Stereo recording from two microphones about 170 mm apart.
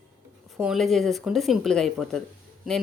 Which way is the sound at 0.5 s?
Centre (ahead or behind).